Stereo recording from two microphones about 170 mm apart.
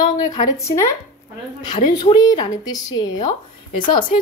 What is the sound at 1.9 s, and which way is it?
A woman's voice, 25° left (ahead or behind).